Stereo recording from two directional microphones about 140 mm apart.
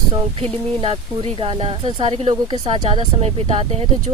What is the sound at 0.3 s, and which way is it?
Speech, 40° right (ahead or behind).